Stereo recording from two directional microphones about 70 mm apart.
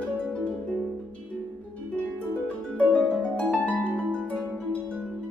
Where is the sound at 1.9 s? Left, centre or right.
Centre.